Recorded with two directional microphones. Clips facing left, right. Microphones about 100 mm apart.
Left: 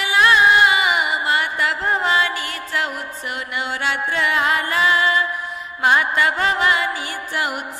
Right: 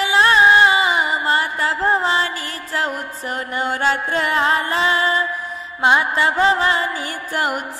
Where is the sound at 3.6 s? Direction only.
40° right (ahead or behind).